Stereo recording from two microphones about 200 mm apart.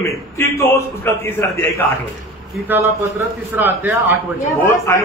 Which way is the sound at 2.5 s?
10° right (ahead or behind).